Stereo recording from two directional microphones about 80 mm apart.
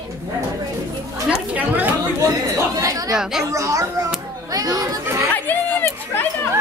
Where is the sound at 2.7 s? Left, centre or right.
Right.